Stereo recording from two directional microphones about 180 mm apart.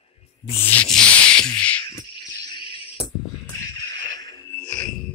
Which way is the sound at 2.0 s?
20° left (ahead or behind).